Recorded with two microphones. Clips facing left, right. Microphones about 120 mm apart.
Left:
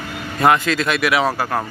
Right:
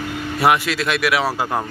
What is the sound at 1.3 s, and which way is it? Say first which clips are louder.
Speech: even; 15° right (ahead or behind).